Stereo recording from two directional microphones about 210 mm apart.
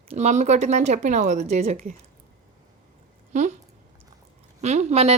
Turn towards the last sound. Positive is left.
turn(degrees=-30)  # may be behind; listen again after turning